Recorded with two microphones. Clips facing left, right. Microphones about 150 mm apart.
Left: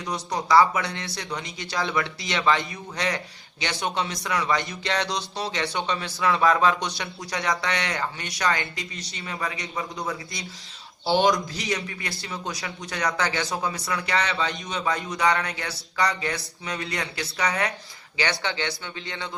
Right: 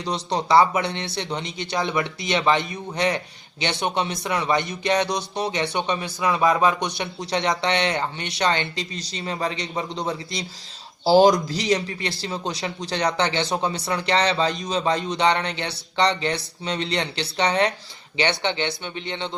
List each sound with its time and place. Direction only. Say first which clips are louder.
0.0 s speech: right 4 dB; 30° right (ahead or behind)
11.0 s speech: right 6 dB; 35° right (ahead or behind)